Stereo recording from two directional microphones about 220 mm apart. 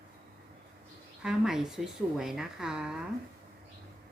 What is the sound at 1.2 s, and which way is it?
A woman's voice, 5° right (ahead or behind).